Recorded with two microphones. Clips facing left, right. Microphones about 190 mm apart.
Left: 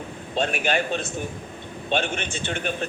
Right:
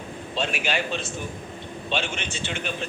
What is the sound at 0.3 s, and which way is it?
A man's voice, 50° left (ahead or behind).